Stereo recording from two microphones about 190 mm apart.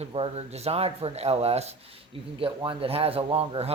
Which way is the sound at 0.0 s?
35° right (ahead or behind).